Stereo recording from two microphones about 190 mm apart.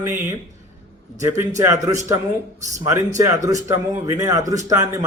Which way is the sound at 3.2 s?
15° right (ahead or behind).